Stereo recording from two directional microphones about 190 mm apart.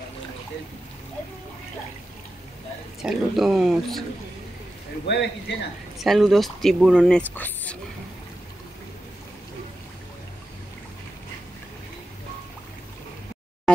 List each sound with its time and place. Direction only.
3.0 s speech: centre (ahead or behind)
5.0 s speech: 65° left (ahead or behind)
5.9 s speech: centre (ahead or behind)